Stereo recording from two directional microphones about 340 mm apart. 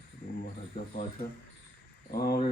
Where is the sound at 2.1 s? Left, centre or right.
Left.